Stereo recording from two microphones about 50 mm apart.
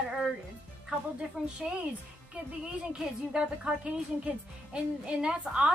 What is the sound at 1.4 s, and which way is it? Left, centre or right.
Speech, right.